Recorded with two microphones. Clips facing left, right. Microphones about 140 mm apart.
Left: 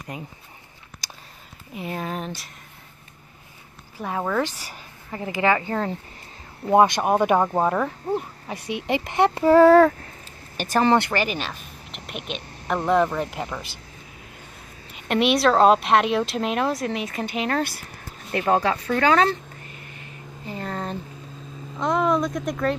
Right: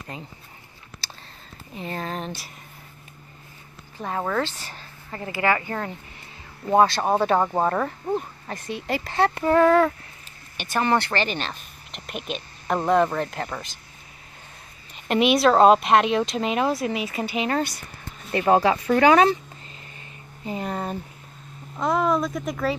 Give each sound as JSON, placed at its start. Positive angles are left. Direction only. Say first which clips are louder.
{"t": 0.1, "sound": "speech", "louder": "left 4 dB", "side_deg": 15}
{"t": 1.0, "sound": "a sound", "louder": "even", "side_deg": 15}
{"t": 1.7, "sound": "speech", "louder": "left 1 dB", "side_deg": 10}
{"t": 4.0, "sound": "speech", "louder": "left 1 dB", "side_deg": 5}
{"t": 7.4, "sound": "speech", "louder": "left 1 dB", "side_deg": 5}
{"t": 10.9, "sound": "speech", "louder": "left 2 dB", "side_deg": 20}
{"t": 11.1, "sound": "speech", "louder": "left 1 dB", "side_deg": 5}
{"t": 15.0, "sound": "speech", "louder": "right 1 dB", "side_deg": 0}
{"t": 20.4, "sound": "speech", "louder": "right 2 dB", "side_deg": -15}